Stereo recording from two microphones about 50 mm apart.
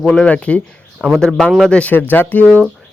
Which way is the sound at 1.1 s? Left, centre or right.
Centre.